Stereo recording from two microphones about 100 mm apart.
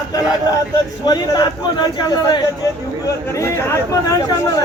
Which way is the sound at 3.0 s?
30° left (ahead or behind).